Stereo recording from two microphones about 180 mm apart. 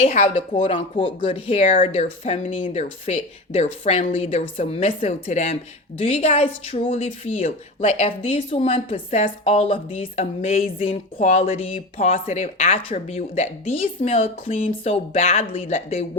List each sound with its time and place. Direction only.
0.0 s speech: 45° left (ahead or behind)
0.7 s speech: 30° left (ahead or behind)
1.6 s speech: 45° left (ahead or behind)
1.9 s a woman's voice: 35° left (ahead or behind)